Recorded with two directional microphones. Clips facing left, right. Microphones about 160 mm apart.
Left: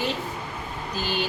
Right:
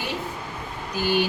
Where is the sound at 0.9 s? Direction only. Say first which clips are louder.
Right 6 dB; 10° right (ahead or behind).